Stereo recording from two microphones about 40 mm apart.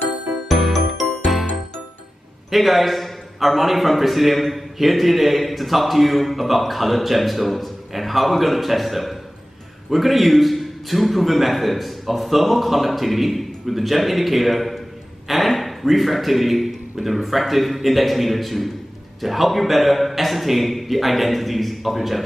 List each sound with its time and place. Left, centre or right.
0.5 s music: centre
2.5 s a man's voice: centre